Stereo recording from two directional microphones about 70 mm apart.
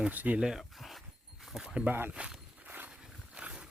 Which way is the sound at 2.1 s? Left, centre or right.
Centre.